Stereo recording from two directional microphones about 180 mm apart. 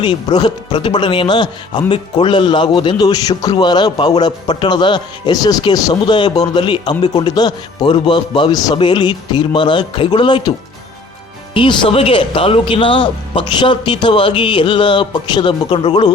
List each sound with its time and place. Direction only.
0.0 s a man's voice: 25° left (ahead or behind)
11.5 s a man's voice: 30° left (ahead or behind)